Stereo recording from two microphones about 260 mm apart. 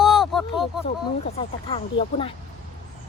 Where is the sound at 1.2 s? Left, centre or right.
Left.